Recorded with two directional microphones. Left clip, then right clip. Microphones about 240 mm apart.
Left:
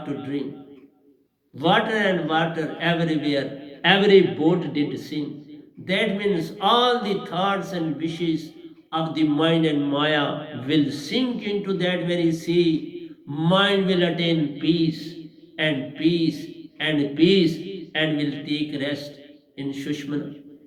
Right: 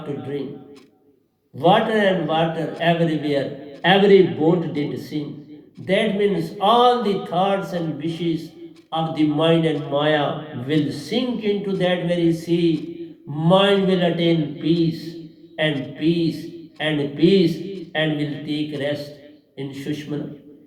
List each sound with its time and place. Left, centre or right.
1.5 s a man's voice: left